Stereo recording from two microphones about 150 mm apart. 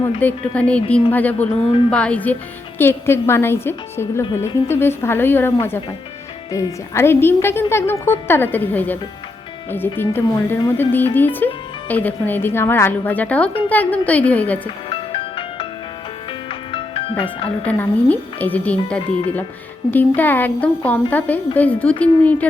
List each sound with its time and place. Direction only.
0.2 s a woman's voice: 10° left (ahead or behind)
14.8 s music: 35° left (ahead or behind)
17.7 s a woman's voice: 10° left (ahead or behind)